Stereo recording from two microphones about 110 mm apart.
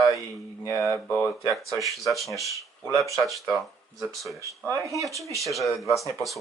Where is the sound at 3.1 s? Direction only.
Centre (ahead or behind).